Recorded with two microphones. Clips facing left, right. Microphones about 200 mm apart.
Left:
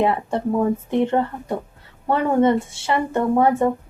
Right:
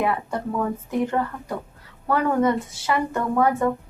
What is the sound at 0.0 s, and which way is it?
A woman's voice, 25° left (ahead or behind).